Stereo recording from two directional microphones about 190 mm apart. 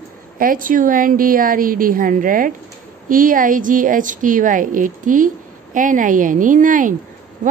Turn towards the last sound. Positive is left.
turn(degrees=-45)  # may be behind; listen again after turning